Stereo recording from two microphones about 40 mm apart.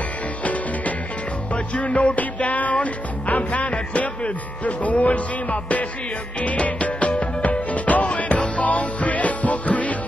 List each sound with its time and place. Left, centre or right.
0.4 s music: left